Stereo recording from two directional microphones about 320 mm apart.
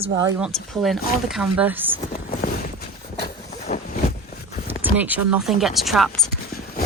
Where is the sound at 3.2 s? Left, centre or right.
Left.